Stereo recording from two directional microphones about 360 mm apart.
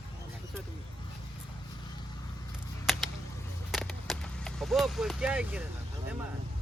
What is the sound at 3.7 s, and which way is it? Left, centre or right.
Vehicle, centre.